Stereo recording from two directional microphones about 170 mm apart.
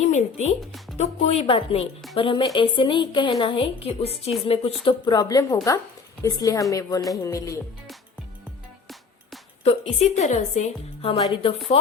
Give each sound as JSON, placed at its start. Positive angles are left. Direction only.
{"t": 0.0, "sound": "a woman's voice", "side_deg": 40}
{"t": 4.9, "sound": "a woman's voice", "side_deg": 25}
{"t": 9.6, "sound": "a woman's voice", "side_deg": 40}